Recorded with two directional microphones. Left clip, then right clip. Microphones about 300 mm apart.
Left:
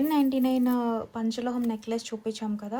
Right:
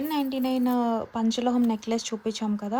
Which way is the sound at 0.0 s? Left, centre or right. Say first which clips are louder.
Left 3 dB; centre.